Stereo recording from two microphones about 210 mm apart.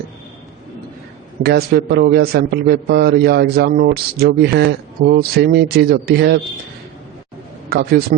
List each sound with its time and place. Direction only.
1.4 s a man's voice: 50° right (ahead or behind)
7.7 s a man's voice: 50° right (ahead or behind)